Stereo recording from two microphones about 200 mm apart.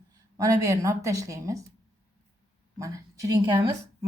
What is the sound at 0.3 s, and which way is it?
A woman's voice, 15° right (ahead or behind).